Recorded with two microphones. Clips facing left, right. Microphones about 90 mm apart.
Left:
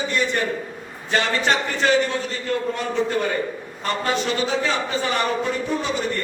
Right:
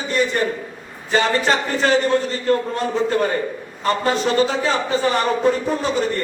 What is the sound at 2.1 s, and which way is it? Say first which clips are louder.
Speech: right 7 dB; 35° right (ahead or behind).